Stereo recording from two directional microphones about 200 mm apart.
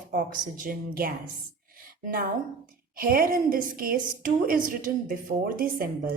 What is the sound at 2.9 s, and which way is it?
Speech, 45° right (ahead or behind).